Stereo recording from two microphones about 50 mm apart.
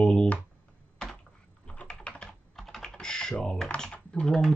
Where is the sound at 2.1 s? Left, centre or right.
Left.